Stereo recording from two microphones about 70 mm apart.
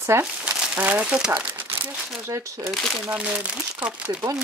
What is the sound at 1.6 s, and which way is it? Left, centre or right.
Crumpling, right.